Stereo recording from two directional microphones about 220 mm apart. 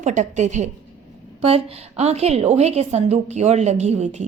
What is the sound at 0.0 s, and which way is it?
A woman's voice, 35° right (ahead or behind).